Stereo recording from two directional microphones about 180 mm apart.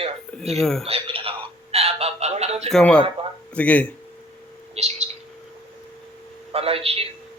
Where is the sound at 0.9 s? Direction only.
30° right (ahead or behind).